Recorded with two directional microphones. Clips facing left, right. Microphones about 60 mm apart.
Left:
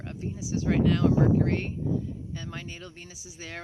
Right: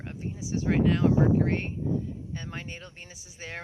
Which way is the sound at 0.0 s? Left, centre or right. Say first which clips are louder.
Left 1 dB; centre.